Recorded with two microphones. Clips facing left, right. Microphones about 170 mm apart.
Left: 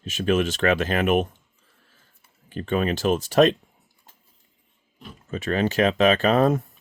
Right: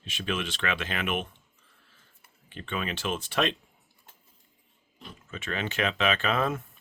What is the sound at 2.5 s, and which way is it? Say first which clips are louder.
Speech: left 10 dB; 40° left (ahead or behind).